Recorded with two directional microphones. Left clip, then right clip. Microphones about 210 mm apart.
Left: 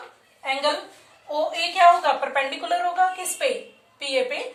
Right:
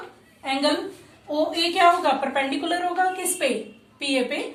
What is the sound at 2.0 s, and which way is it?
Speech, 15° left (ahead or behind).